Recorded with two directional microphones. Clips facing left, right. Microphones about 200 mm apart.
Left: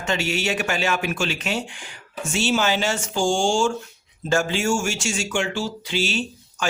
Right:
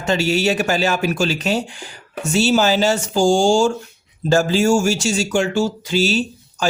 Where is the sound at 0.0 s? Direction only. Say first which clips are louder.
Right 7 dB; 35° right (ahead or behind).